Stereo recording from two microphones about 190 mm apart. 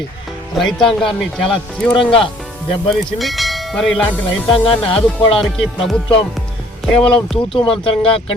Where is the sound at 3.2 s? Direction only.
Centre (ahead or behind).